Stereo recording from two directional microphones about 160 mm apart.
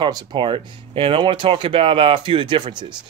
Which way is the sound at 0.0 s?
30° right (ahead or behind).